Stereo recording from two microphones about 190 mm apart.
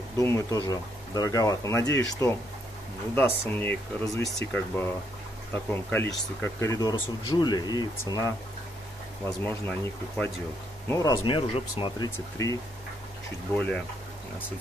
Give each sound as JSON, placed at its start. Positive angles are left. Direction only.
{"t": 0.2, "sound": "speech", "side_deg": 15}
{"t": 9.4, "sound": "speech", "side_deg": 10}
{"t": 13.6, "sound": "speech", "side_deg": 5}